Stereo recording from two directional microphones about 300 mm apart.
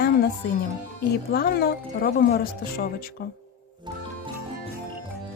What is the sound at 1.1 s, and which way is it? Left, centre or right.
Speech, left.